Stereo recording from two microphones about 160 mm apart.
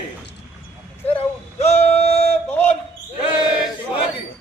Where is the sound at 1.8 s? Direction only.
40° left (ahead or behind).